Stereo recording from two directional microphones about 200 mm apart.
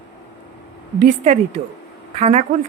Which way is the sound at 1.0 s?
35° right (ahead or behind).